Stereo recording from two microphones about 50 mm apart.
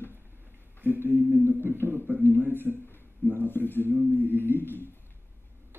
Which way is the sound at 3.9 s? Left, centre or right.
Right.